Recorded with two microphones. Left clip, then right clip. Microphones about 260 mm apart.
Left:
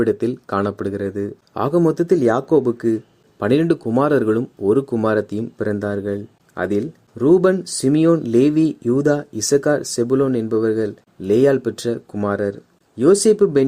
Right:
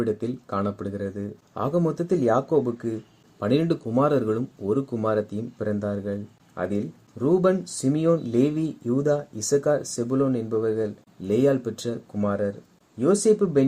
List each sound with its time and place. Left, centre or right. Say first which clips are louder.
0.0 s speech: left 8 dB; left